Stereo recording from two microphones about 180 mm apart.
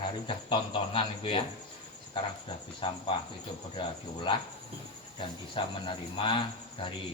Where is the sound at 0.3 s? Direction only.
30° left (ahead or behind).